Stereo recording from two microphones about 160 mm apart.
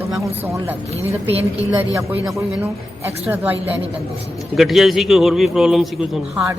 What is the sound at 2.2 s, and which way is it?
Speech, centre (ahead or behind).